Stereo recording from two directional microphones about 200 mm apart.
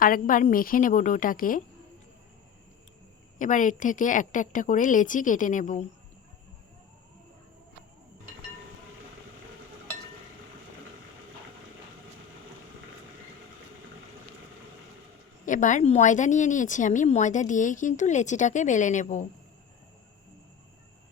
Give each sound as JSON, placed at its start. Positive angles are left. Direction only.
{"t": 0.0, "sound": "a woman's voice", "side_deg": 45}
{"t": 3.3, "sound": "speech", "side_deg": 40}
{"t": 15.4, "sound": "speech", "side_deg": 40}